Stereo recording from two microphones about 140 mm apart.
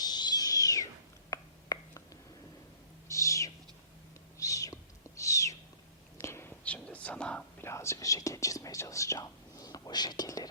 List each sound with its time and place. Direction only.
0.0 s owl: 30° left (ahead or behind)
1.3 s a sound: 25° left (ahead or behind)
3.1 s owl: 20° left (ahead or behind)
4.4 s whispering: 25° left (ahead or behind); by 7.7 s 10° left (ahead or behind)
7.7 s speech: 20° left (ahead or behind)